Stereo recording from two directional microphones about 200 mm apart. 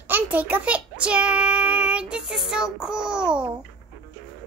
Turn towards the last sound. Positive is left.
turn(degrees=-5)  # may be behind; listen again after turning